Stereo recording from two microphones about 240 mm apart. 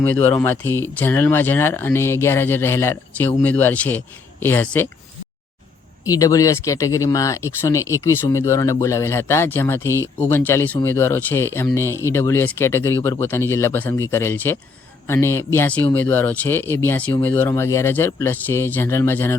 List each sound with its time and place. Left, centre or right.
0.2 s speech: centre
6.1 s speech: centre